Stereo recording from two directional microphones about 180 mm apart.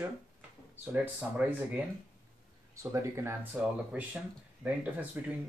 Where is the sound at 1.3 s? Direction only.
10° right (ahead or behind).